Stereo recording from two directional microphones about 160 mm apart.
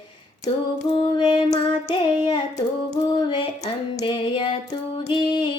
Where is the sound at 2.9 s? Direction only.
30° left (ahead or behind).